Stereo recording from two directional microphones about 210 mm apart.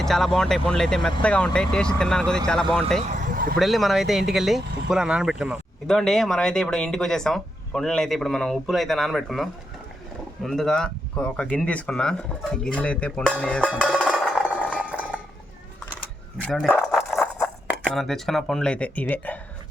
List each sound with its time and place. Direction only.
0.0 s speech: centre (ahead or behind)
3.1 s vehicle: 40° right (ahead or behind)
3.6 s speech: centre (ahead or behind)
13.7 s music: centre (ahead or behind)
14.8 s a sound: 5° right (ahead or behind)
16.4 s dog: 5° left (ahead or behind)
17.7 s speech: centre (ahead or behind)